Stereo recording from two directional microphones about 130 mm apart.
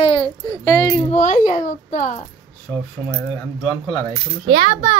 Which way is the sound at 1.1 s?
70° left (ahead or behind).